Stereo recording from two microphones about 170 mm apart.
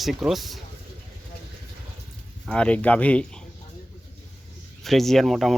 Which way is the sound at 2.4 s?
5° left (ahead or behind).